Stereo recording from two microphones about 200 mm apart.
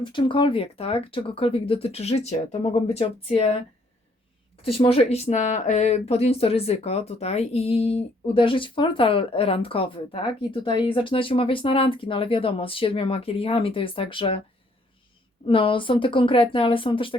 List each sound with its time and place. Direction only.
0.0 s speech: 25° left (ahead or behind)
4.6 s speech: 30° left (ahead or behind)
15.4 s speech: 25° left (ahead or behind)